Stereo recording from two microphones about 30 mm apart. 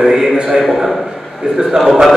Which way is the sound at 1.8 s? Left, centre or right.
Right.